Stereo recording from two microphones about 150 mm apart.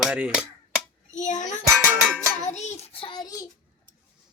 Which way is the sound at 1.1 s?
55° left (ahead or behind).